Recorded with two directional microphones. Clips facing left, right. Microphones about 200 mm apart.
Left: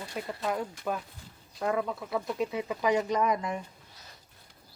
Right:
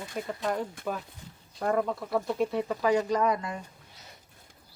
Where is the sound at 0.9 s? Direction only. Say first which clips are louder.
Left 1 dB; centre (ahead or behind); by 3.5 s 20° left (ahead or behind).